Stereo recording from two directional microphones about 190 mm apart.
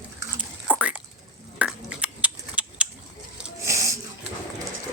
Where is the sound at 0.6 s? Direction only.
5° right (ahead or behind).